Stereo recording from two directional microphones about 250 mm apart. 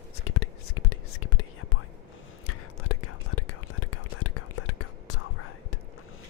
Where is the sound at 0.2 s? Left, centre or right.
Left.